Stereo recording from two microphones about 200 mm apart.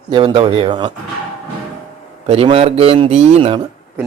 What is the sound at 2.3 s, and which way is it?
Speech, 30° right (ahead or behind).